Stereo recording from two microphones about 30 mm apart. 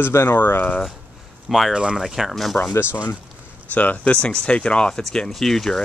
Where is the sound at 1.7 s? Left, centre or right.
Right.